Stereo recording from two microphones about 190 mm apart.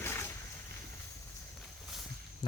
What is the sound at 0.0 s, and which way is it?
Boat, 15° left (ahead or behind).